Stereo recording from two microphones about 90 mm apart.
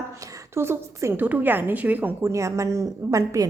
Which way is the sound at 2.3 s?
35° right (ahead or behind).